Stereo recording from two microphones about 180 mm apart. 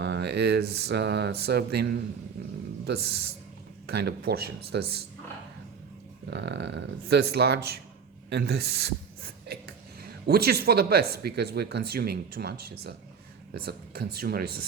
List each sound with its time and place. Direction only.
0.0 s speech: 70° right (ahead or behind)
6.3 s speech: 75° right (ahead or behind)